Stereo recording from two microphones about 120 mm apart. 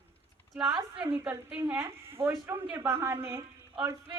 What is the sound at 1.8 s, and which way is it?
Speech, 20° right (ahead or behind).